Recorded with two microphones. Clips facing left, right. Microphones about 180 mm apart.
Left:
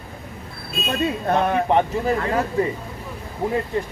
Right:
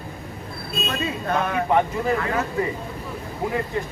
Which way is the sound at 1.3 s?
35° left (ahead or behind).